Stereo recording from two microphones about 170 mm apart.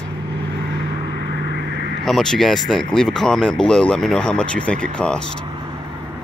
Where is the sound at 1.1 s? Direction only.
75° right (ahead or behind).